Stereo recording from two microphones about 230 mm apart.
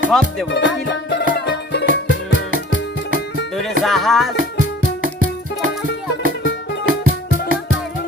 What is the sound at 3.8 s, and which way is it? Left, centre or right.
Music, centre.